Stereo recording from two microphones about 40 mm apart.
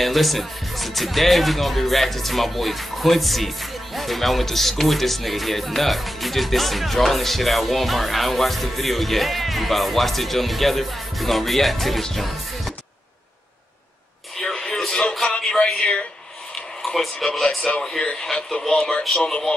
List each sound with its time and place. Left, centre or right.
0.0 s music: centre
14.4 s music: centre
16.8 s speech: centre; by 19.4 s left